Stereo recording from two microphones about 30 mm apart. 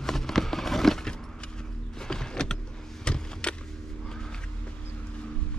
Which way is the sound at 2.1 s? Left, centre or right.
Left.